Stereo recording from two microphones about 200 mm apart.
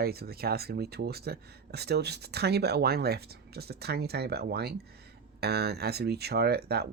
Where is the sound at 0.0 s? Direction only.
50° right (ahead or behind).